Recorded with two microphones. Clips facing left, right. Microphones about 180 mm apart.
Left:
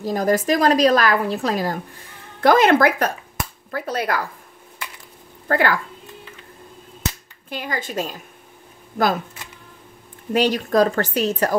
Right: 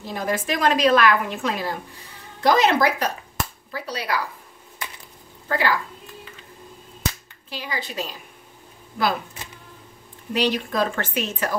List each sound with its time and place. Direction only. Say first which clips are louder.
0.0 s a woman's voice: left 7 dB; 40° left (ahead or behind)
5.5 s speech: left 3 dB; 55° left (ahead or behind)
7.4 s a woman's voice: left 4 dB; 50° left (ahead or behind)
10.3 s a woman's voice: left 5 dB; 45° left (ahead or behind)